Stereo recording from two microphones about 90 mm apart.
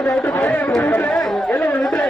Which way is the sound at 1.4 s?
20° left (ahead or behind).